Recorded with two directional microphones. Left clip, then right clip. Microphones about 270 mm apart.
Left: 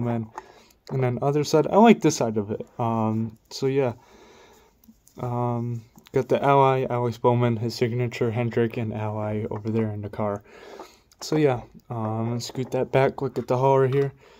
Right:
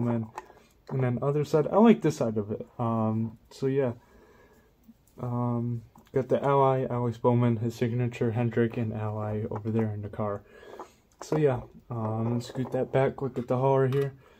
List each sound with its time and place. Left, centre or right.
0.9 s speech: left
5.1 s speech: left